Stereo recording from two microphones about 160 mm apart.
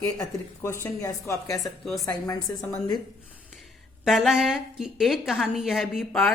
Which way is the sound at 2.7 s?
25° left (ahead or behind).